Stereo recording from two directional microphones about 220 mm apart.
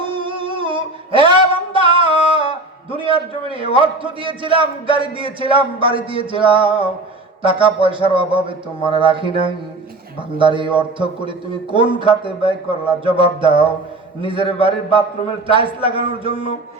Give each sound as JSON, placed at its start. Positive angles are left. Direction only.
{"t": 0.0, "sound": "a sound", "side_deg": -25}
{"t": 2.1, "sound": "humming", "side_deg": -20}
{"t": 2.9, "sound": "a man's voice", "side_deg": -25}